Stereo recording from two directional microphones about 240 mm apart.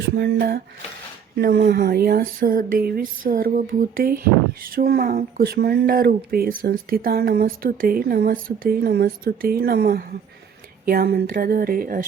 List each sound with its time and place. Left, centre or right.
0.0 s speech: right